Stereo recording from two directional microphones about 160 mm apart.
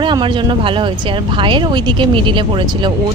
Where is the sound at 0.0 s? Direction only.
30° right (ahead or behind).